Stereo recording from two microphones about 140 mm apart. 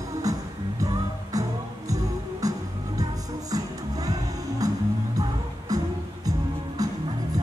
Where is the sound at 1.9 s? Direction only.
25° right (ahead or behind).